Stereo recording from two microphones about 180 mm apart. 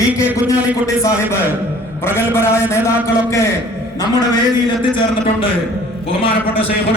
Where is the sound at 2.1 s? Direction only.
15° left (ahead or behind).